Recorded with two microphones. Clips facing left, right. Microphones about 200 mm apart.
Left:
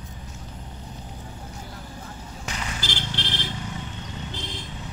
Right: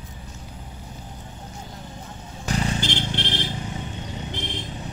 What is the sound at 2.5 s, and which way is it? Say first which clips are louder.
Vehicle: right 9 dB; 30° right (ahead or behind).